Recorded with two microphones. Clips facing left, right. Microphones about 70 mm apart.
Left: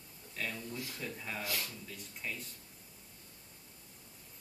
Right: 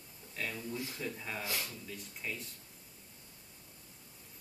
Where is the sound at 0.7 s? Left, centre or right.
Right.